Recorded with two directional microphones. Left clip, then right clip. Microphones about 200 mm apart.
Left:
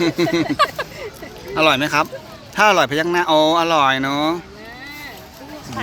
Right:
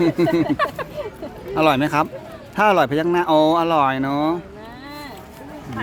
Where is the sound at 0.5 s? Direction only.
50° left (ahead or behind).